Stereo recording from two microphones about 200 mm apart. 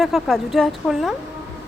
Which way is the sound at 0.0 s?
Centre (ahead or behind).